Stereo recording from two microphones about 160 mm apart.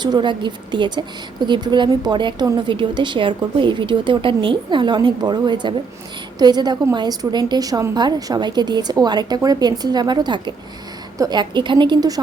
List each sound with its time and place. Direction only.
0.0 s a woman's voice: 30° right (ahead or behind)